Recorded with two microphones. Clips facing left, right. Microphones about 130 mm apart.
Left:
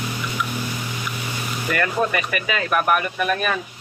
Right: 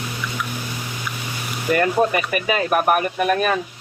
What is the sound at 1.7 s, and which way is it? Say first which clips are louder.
Speech: right 4 dB; 35° right (ahead or behind).